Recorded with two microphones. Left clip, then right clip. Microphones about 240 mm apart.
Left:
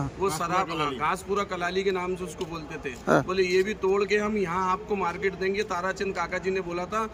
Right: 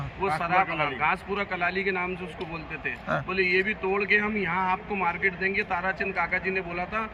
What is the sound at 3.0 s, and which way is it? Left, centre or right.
Speech, left.